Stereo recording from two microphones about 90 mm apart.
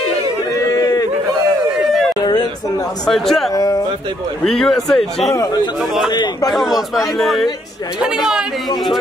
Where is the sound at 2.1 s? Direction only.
50° left (ahead or behind).